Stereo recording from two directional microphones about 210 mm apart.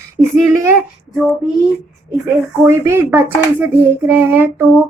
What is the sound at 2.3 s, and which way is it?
Child singing, 10° right (ahead or behind).